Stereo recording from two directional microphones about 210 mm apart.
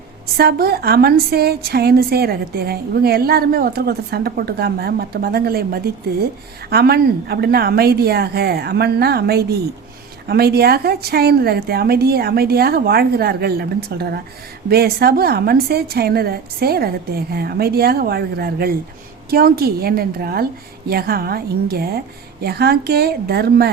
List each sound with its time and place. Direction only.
0.3 s a woman's voice: 50° right (ahead or behind)